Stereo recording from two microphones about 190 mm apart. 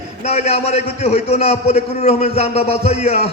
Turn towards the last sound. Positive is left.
turn(degrees=35)  # may be behind; listen again after turning